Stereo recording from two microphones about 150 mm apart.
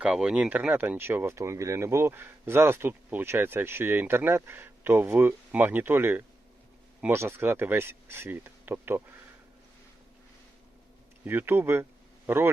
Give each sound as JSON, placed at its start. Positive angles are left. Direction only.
{"t": 0.0, "sound": "speech", "side_deg": -5}
{"t": 11.3, "sound": "speech", "side_deg": -15}